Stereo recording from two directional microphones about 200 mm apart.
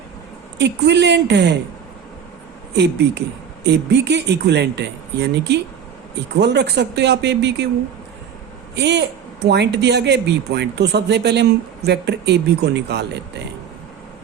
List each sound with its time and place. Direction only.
0.6 s speech: 60° right (ahead or behind)
2.7 s speech: 60° right (ahead or behind)
8.7 s speech: 60° right (ahead or behind)